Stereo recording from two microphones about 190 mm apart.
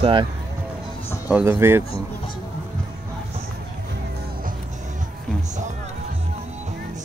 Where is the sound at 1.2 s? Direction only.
10° right (ahead or behind).